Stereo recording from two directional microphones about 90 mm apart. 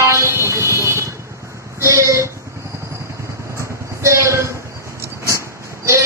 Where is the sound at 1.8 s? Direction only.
35° right (ahead or behind).